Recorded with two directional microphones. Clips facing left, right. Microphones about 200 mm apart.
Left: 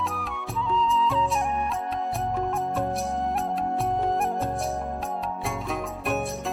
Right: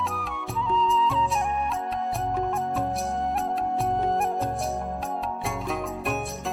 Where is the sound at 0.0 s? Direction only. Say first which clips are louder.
Even; centre (ahead or behind).